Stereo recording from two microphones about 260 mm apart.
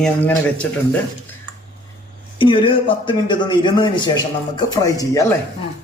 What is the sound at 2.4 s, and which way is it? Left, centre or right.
A man's voice, centre.